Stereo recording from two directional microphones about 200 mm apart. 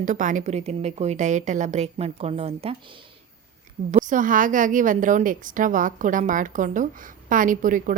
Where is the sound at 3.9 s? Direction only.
40° right (ahead or behind).